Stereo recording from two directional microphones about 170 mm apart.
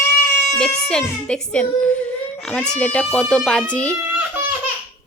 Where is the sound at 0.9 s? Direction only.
5° left (ahead or behind).